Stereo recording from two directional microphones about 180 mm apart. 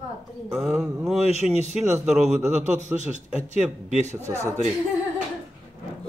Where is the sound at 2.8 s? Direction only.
40° right (ahead or behind).